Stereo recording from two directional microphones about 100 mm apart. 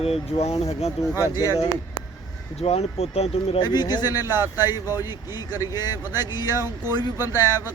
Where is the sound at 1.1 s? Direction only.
30° left (ahead or behind).